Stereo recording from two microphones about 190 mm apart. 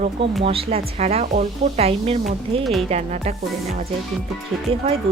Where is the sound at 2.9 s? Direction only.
35° right (ahead or behind).